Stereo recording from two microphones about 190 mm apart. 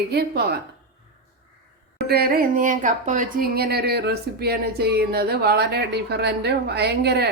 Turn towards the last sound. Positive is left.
turn(degrees=-60)  # may be behind; listen again after turning